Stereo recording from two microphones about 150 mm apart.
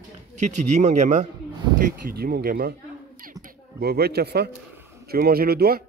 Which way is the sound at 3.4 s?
90° right.